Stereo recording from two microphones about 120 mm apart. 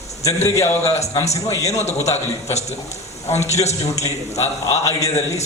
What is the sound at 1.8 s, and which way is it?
A man's voice, 65° left (ahead or behind).